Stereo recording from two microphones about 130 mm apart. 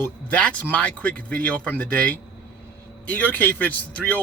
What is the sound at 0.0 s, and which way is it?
A man's voice, 10° left (ahead or behind).